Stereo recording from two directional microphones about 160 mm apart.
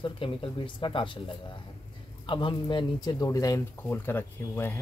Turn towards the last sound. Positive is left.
turn(degrees=15)  # may be behind; listen again after turning